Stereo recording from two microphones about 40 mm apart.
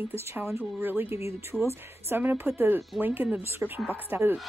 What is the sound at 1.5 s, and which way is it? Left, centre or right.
Speech, right.